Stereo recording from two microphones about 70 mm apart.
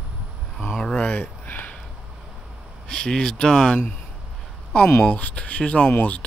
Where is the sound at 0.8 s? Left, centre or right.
Centre.